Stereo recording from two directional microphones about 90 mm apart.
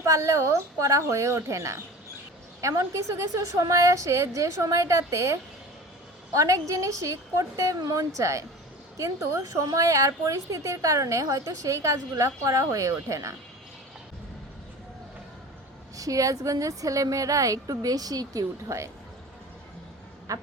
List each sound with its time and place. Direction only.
0.0 s a woman's voice: 35° right (ahead or behind)
16.0 s a woman's voice: 40° right (ahead or behind)
20.3 s a woman's voice: 40° right (ahead or behind)